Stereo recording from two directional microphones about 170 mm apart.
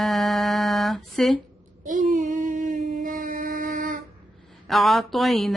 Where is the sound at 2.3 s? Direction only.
50° right (ahead or behind).